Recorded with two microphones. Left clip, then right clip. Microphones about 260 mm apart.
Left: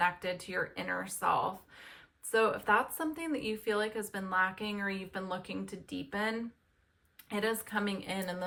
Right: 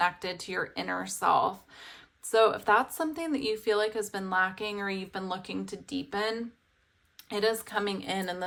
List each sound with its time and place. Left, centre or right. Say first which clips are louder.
0.0 s speech: right 3 dB; centre